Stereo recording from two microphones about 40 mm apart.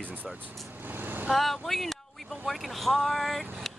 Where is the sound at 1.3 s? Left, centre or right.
Centre.